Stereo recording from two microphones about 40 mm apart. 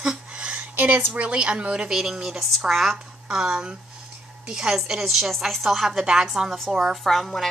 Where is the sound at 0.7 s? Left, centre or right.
Right.